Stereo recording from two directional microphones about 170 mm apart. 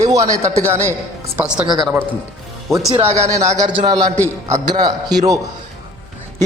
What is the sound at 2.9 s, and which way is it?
A man's voice, 35° right (ahead or behind).